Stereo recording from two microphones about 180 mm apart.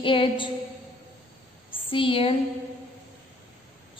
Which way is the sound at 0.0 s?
30° left (ahead or behind).